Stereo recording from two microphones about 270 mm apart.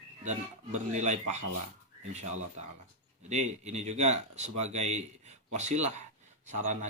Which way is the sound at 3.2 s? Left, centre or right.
Right.